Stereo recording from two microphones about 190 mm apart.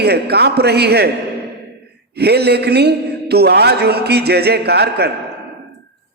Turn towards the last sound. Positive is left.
turn(degrees=-60)  # may be behind; listen again after turning